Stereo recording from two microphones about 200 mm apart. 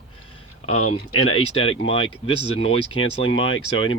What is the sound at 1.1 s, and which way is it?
Speech, 90° left.